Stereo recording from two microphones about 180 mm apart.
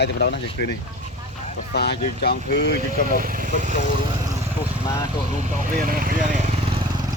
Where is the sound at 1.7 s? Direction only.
65° left (ahead or behind).